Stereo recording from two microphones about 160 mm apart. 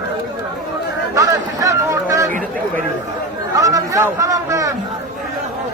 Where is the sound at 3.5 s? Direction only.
20° right (ahead or behind).